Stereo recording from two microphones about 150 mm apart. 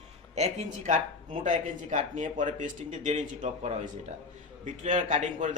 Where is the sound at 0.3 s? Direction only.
50° right (ahead or behind).